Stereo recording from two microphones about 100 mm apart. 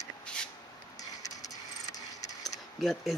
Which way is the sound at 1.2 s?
35° left (ahead or behind).